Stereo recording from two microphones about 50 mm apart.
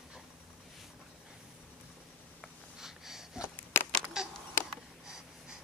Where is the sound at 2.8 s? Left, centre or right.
Centre.